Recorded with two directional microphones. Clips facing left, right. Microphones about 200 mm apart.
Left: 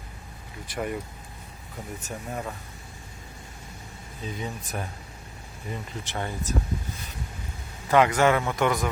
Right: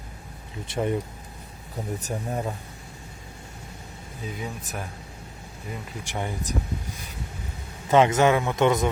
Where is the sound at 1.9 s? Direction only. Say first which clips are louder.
Right 3 dB; 35° right (ahead or behind).